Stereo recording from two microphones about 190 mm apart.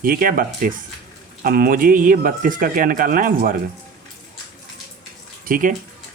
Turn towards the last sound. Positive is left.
turn(degrees=-45)  # may be behind; listen again after turning